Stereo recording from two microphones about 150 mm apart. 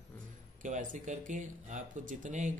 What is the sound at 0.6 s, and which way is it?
Speech, 55° right (ahead or behind).